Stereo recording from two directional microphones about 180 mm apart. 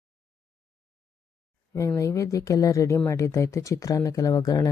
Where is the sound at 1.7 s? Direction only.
15° left (ahead or behind).